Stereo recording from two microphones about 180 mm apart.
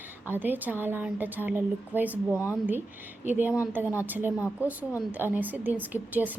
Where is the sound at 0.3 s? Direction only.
10° right (ahead or behind).